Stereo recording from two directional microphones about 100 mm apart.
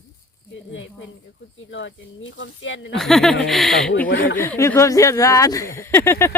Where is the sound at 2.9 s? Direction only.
5° left (ahead or behind).